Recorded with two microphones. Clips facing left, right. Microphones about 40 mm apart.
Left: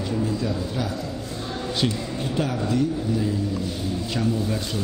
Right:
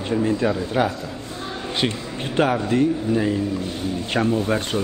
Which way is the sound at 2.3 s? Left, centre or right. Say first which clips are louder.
Right 6 dB; right.